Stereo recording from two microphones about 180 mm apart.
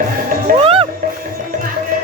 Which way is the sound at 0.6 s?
30° right (ahead or behind).